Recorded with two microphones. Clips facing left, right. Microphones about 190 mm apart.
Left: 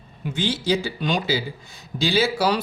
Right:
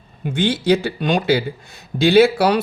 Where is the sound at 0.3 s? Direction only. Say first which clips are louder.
Right 6 dB; 55° right (ahead or behind).